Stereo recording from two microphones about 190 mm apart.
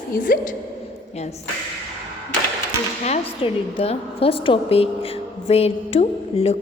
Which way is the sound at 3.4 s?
25° left (ahead or behind).